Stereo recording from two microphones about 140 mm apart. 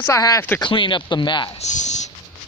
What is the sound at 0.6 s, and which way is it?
Speech, 35° left (ahead or behind).